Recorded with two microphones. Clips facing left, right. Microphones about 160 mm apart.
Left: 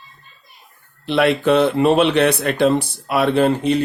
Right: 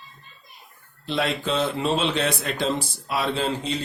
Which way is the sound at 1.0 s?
70° left (ahead or behind).